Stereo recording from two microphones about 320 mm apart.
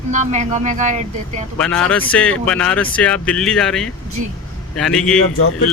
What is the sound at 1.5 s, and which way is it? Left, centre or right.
Speech, centre.